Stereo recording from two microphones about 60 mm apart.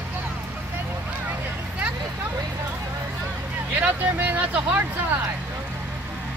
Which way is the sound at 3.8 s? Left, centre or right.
Right.